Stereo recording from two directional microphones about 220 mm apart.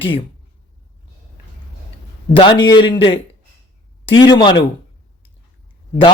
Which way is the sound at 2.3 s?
20° left (ahead or behind).